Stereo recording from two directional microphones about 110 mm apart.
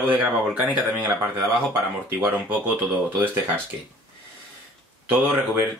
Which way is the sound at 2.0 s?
20° right (ahead or behind).